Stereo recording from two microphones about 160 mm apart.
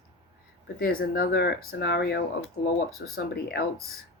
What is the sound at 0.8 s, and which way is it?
Speech, 70° left (ahead or behind).